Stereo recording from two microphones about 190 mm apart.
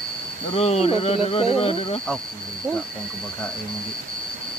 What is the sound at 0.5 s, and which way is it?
Speech, 30° left (ahead or behind).